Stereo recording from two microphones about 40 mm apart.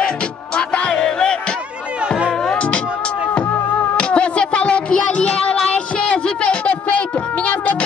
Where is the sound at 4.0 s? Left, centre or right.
Left.